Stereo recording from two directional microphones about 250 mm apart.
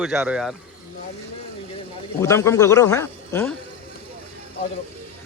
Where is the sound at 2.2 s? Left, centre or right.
Centre.